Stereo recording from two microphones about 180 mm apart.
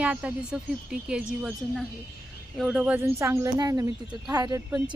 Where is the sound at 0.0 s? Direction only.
5° right (ahead or behind).